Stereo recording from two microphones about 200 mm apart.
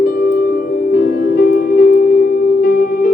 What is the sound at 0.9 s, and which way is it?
Music, 50° left (ahead or behind).